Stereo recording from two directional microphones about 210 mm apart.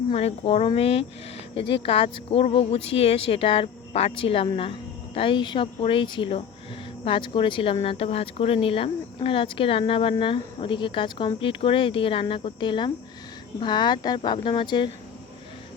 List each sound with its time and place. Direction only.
0.1 s speech: 30° left (ahead or behind)